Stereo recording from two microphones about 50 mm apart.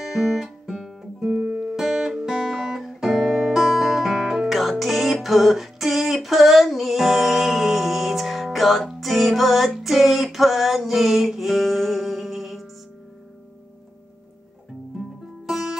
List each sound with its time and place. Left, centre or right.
0.0 s guitar: centre
1.4 s music: right
1.8 s music: centre
9.8 s female singing: centre
15.0 s music: centre